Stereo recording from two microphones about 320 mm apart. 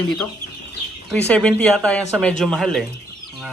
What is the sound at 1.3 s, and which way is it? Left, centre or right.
Speech, centre.